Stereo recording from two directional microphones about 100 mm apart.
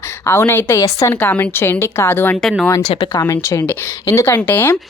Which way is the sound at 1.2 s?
15° left (ahead or behind).